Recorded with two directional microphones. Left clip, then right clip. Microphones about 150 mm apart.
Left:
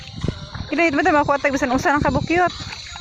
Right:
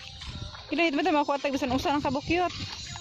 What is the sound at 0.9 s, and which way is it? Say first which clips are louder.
Speech: left 10 dB; 10° right (ahead or behind).